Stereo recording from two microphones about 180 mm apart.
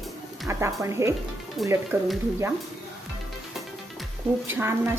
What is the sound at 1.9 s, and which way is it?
Speech, 15° right (ahead or behind).